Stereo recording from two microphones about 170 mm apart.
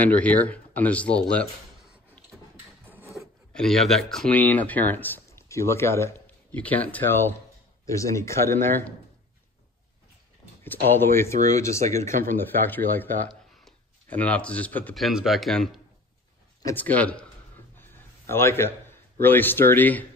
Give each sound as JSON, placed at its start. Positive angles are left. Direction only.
{"t": 0.0, "sound": "speech", "side_deg": 10}
{"t": 3.5, "sound": "speech", "side_deg": 0}
{"t": 10.6, "sound": "speech", "side_deg": 15}
{"t": 18.3, "sound": "speech", "side_deg": 15}